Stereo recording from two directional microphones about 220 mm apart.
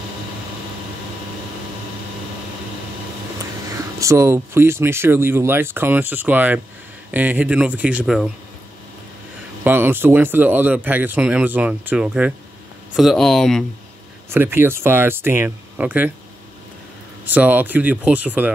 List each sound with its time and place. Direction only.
3.7 s a man's voice: 15° right (ahead or behind)
9.7 s a man's voice: 10° right (ahead or behind)
14.3 s speech: 10° right (ahead or behind)
17.3 s speech: 5° right (ahead or behind)